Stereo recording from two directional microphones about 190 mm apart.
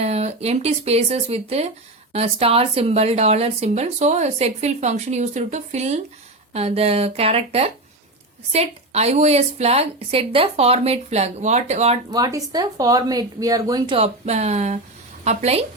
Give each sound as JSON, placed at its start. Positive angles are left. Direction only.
{"t": 0.0, "sound": "speech", "side_deg": -35}
{"t": 12.1, "sound": "speech", "side_deg": -20}